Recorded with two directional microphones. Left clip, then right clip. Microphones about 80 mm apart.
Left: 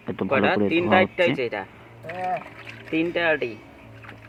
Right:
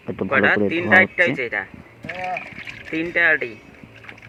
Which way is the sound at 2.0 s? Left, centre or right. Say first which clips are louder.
Right 1 dB; left.